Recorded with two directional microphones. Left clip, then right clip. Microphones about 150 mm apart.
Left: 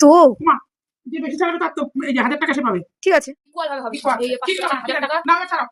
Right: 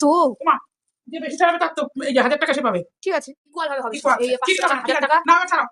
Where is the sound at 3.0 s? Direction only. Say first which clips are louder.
Left 9 dB; 35° left (ahead or behind).